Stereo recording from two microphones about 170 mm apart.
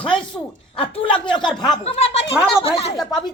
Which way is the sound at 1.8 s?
35° left (ahead or behind).